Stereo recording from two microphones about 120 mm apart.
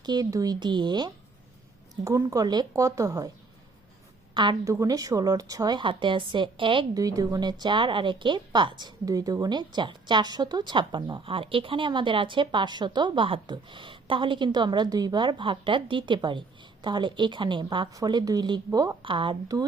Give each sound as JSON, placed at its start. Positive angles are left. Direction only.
{"t": 0.0, "sound": "a woman's voice", "side_deg": -35}
{"t": 4.6, "sound": "a woman's voice", "side_deg": -25}
{"t": 6.9, "sound": "a woman's voice", "side_deg": -30}
{"t": 19.0, "sound": "a woman's voice", "side_deg": -45}